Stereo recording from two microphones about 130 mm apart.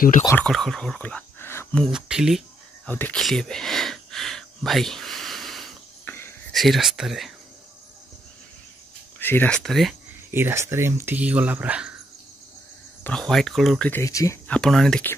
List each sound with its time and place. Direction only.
0.4 s speech: 5° left (ahead or behind)
1.8 s speech: 5° right (ahead or behind)
2.9 s speech: 15° left (ahead or behind)
3.2 s a sound: centre (ahead or behind)
6.0 s a sound: 15° left (ahead or behind)
6.5 s speech: centre (ahead or behind)
9.2 s speech: 15° left (ahead or behind)
9.6 s speech: centre (ahead or behind)
10.3 s speech: 20° right (ahead or behind)
13.0 s speech: 5° left (ahead or behind)
14.0 s speech: 25° left (ahead or behind)
14.5 s speech: 5° left (ahead or behind)